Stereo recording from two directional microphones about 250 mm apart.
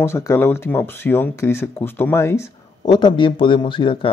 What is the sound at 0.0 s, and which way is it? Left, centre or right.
Speech, centre.